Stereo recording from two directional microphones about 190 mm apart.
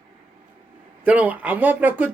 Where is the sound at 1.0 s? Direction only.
5° right (ahead or behind).